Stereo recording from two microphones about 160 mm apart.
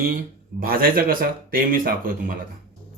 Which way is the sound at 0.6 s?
65° right (ahead or behind).